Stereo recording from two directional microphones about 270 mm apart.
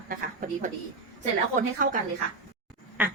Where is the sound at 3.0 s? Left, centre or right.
Centre.